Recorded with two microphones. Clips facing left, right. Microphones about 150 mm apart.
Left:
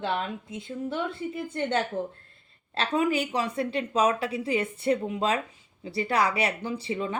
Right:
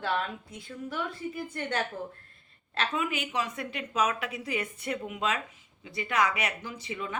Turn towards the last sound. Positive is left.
turn(degrees=30)  # may be behind; listen again after turning